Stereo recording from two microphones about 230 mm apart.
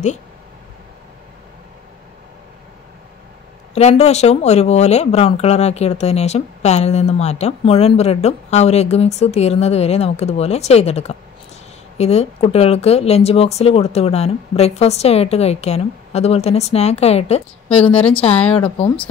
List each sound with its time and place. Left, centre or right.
3.7 s speech: left